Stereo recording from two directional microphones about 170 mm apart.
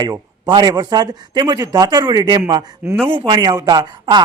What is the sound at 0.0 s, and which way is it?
Speech, 25° right (ahead or behind).